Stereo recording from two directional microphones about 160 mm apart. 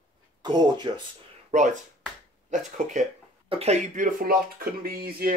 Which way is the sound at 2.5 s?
50° right (ahead or behind).